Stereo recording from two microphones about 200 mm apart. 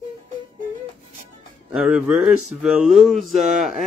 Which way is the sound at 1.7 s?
5° right (ahead or behind).